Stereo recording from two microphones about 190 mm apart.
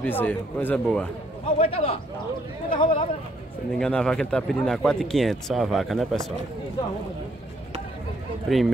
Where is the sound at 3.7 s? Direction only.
5° left (ahead or behind).